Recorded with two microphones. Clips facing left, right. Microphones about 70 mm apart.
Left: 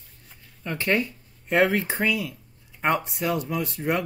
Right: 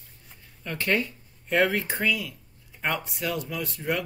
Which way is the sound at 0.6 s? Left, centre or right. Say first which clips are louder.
Left 2 dB; centre.